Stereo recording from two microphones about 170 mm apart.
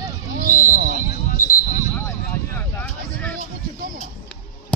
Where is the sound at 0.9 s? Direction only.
45° left (ahead or behind).